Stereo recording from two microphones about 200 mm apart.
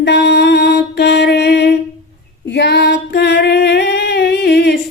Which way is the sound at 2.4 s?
60° left (ahead or behind).